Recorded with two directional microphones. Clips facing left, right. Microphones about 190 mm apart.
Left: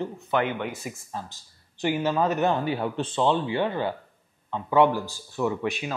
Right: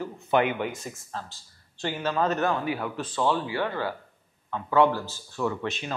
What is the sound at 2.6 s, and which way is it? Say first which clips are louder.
Speech: left 3 dB; 30° left (ahead or behind).